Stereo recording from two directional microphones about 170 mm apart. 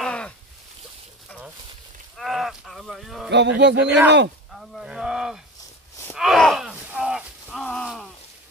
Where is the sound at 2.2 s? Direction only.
Centre (ahead or behind).